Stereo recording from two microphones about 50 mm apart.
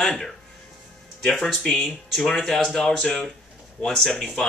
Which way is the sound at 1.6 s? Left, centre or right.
Centre.